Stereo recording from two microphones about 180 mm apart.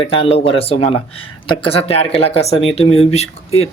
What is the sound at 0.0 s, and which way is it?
Speech, 30° left (ahead or behind).